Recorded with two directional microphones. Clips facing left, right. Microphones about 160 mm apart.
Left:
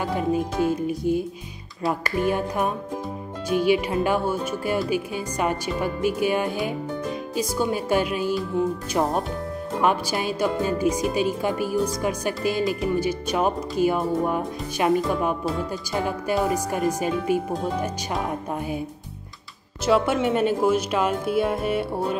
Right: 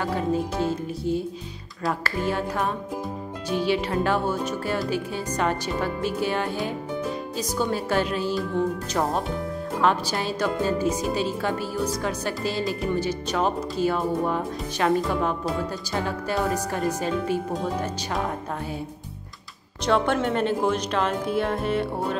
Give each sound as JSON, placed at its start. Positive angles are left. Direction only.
{"t": 0.0, "sound": "speech", "side_deg": 15}
{"t": 19.8, "sound": "speech", "side_deg": 5}